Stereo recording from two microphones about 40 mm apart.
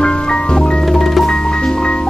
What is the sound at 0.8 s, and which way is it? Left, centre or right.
Music, centre.